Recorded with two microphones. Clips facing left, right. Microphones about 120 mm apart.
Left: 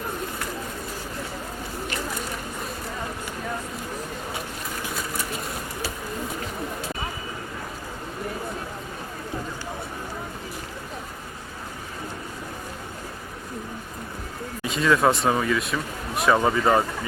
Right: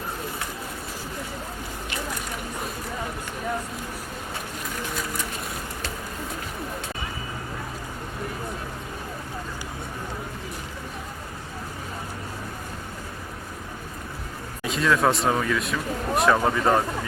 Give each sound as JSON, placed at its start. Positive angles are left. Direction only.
{"t": 14.6, "sound": "speech", "side_deg": 0}